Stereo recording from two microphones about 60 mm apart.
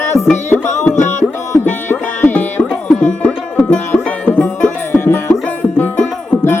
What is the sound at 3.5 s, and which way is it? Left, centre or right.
Music, left.